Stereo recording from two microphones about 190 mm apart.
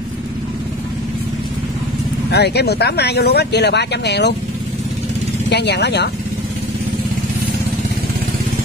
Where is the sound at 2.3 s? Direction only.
60° left (ahead or behind).